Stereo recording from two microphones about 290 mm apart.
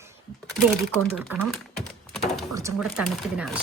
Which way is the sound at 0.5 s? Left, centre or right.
Centre.